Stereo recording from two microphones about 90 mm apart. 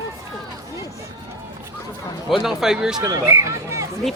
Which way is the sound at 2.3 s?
5° right (ahead or behind).